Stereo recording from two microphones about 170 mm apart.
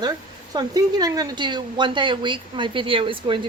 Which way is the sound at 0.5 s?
25° right (ahead or behind).